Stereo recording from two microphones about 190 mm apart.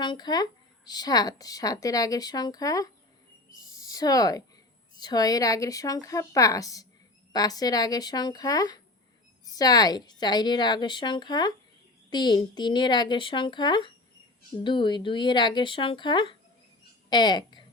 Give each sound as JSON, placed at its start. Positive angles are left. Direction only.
{"t": 0.0, "sound": "speech", "side_deg": 25}